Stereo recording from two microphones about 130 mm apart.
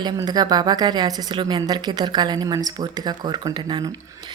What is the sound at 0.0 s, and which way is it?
A woman's voice, 30° right (ahead or behind).